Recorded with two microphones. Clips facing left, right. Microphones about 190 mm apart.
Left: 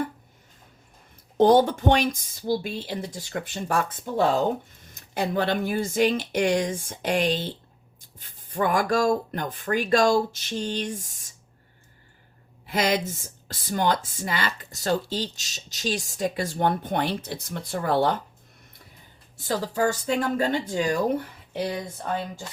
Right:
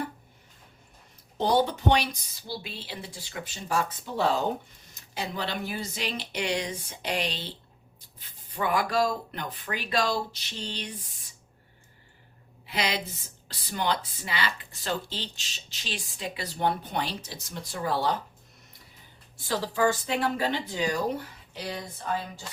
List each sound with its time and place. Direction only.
1.4 s speech: 50° left (ahead or behind)
12.6 s speech: 45° left (ahead or behind)
19.5 s speech: 45° left (ahead or behind)